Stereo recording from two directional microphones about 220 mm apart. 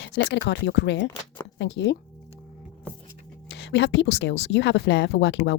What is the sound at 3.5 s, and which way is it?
Speech, 50° left (ahead or behind).